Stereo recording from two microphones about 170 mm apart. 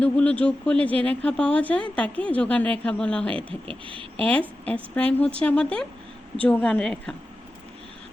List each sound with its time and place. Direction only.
0.0 s speech: 10° left (ahead or behind)
3.7 s speech: 30° right (ahead or behind)
4.3 s speech: 10° left (ahead or behind)